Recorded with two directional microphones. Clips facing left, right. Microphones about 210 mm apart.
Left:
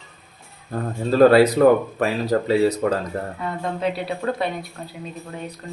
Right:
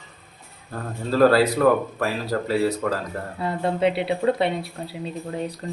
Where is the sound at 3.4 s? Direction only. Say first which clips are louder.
Right 6 dB; 30° right (ahead or behind).